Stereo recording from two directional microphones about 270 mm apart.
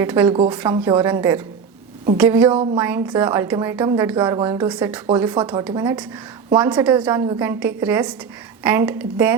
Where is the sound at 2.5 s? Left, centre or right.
Centre.